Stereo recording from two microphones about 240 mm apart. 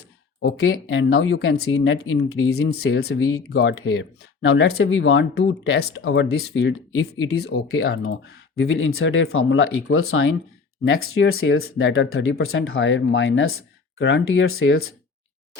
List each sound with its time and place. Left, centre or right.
0.4 s speech: left